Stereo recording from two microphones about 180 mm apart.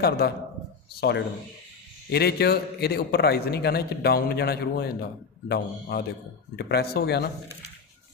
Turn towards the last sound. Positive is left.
turn(degrees=65)  # may be behind; listen again after turning